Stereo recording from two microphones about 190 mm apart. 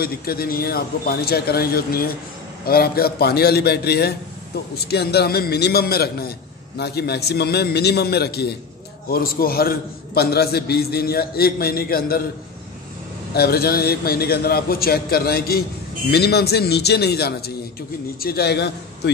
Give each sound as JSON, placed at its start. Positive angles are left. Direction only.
{"t": 0.0, "sound": "a man's voice", "side_deg": 55}
{"t": 13.3, "sound": "a man's voice", "side_deg": 55}